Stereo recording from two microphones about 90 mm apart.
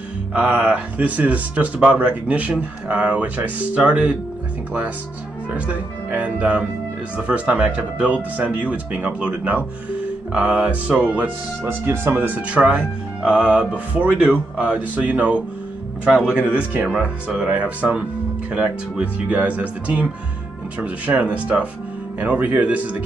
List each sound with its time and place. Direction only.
0.3 s speech: 20° right (ahead or behind)
5.5 s speech: 20° right (ahead or behind)